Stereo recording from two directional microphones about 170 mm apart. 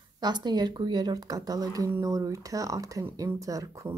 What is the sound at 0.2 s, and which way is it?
Speech, 25° right (ahead or behind).